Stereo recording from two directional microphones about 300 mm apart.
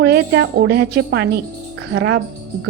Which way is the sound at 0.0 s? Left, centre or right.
Right.